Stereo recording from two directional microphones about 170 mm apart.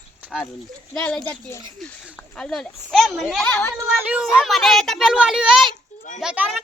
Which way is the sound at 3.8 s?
10° right (ahead or behind).